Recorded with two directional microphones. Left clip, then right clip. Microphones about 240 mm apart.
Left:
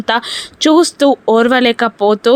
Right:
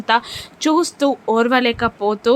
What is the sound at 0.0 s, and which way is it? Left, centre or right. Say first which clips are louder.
A woman's voice: left 2 dB; left.